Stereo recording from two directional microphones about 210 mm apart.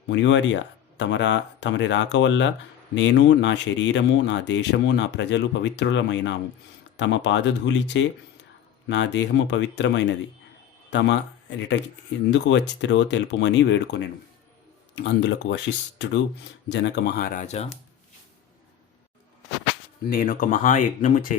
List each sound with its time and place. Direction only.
0.1 s speech: 60° left (ahead or behind)
17.4 s speech: 30° left (ahead or behind)
20.1 s speech: 40° left (ahead or behind)